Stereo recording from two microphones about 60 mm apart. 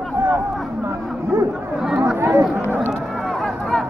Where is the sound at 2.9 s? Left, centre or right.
Centre.